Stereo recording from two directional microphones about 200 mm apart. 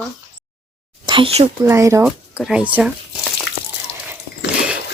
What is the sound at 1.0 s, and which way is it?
Speech, 25° right (ahead or behind).